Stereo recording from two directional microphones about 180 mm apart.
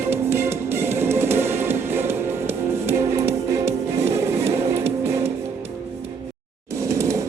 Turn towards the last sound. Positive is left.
turn(degrees=-15)  # may be behind; listen again after turning